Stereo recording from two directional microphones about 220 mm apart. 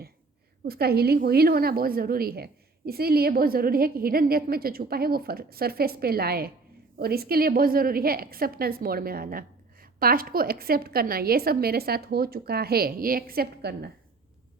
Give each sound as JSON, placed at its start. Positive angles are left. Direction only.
{"t": 0.6, "sound": "a woman's voice", "side_deg": -45}